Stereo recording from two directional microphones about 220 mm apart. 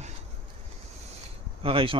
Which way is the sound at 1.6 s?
25° right (ahead or behind).